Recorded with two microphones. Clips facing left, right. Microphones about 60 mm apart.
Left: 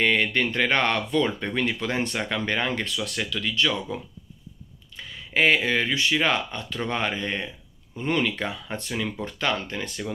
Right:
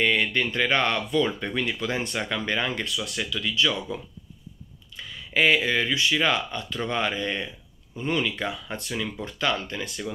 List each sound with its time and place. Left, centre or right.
0.0 s speech: left
4.9 s speech: left